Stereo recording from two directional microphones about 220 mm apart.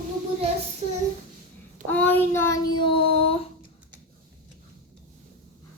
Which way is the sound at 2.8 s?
25° left (ahead or behind).